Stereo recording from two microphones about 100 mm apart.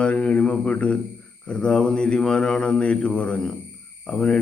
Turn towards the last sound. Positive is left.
turn(degrees=5)  # may be behind; listen again after turning